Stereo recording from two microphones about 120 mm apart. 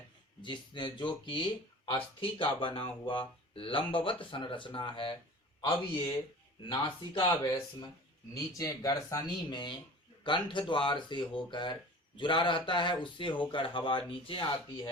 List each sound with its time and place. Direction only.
0.4 s speech: 40° left (ahead or behind)
6.6 s speech: 45° left (ahead or behind)
8.5 s speech: 30° left (ahead or behind); by 14.4 s 45° left (ahead or behind)